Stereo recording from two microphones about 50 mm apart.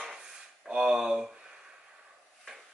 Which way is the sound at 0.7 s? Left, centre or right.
Centre.